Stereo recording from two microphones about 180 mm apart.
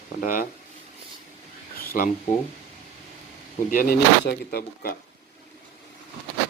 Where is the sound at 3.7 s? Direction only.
55° left (ahead or behind).